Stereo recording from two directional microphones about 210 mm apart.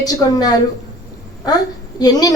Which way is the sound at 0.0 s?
20° left (ahead or behind).